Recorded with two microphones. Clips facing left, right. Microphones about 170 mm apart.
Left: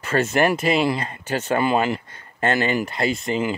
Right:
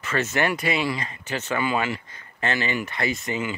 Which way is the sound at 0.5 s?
50° left (ahead or behind).